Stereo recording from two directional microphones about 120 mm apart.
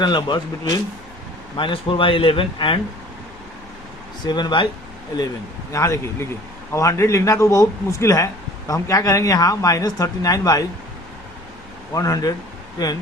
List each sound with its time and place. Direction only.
0.0 s speech: 40° left (ahead or behind)
4.2 s speech: 35° left (ahead or behind)
5.7 s speech: 25° left (ahead or behind)
11.9 s speech: 30° left (ahead or behind)